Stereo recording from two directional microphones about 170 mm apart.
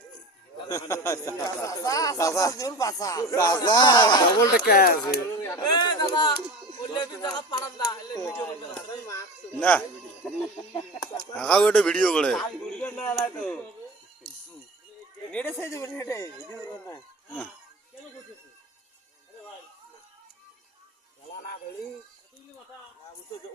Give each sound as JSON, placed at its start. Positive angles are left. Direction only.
{"t": 0.7, "sound": "speech", "side_deg": 20}
{"t": 4.6, "sound": "speech", "side_deg": 60}
{"t": 5.4, "sound": "speech", "side_deg": 15}
{"t": 5.7, "sound": "speech", "side_deg": 25}
{"t": 11.3, "sound": "a man's voice", "side_deg": 5}
{"t": 15.3, "sound": "speech", "side_deg": 10}